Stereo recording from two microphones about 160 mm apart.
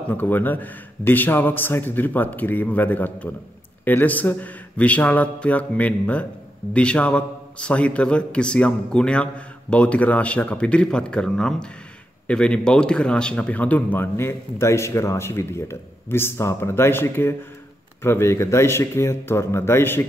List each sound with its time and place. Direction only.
0.1 s a man's voice: 10° left (ahead or behind)